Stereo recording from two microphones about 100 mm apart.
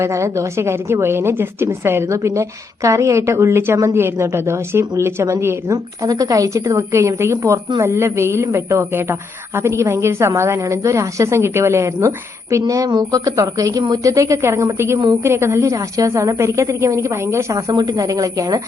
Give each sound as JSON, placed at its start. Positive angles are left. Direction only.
{"t": 0.0, "sound": "a woman's voice", "side_deg": -30}
{"t": 17.7, "sound": "speech", "side_deg": -45}